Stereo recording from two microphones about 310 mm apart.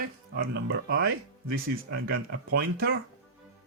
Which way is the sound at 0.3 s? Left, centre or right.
Right.